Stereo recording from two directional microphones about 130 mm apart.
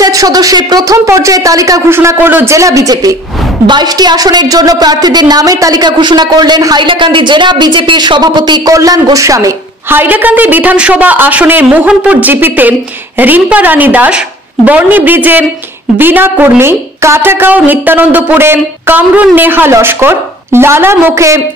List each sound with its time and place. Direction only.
0.0 s a woman's voice: 30° right (ahead or behind)